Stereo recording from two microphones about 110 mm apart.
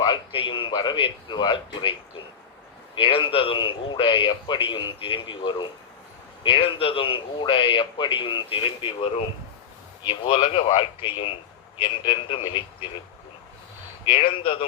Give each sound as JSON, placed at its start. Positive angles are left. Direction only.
{"t": 0.0, "sound": "a man's voice", "side_deg": 50}
{"t": 10.4, "sound": "a man's voice", "side_deg": 75}
{"t": 14.0, "sound": "speech", "side_deg": 55}